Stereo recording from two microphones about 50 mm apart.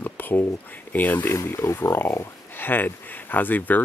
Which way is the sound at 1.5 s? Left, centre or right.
Left.